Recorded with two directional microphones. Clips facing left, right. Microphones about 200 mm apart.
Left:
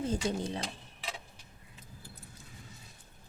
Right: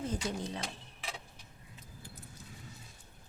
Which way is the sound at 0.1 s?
30° left (ahead or behind).